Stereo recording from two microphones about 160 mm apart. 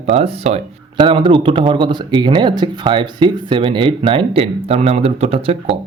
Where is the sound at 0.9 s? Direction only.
30° right (ahead or behind).